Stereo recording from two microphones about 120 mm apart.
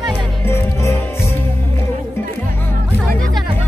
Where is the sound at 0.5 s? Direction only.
25° left (ahead or behind).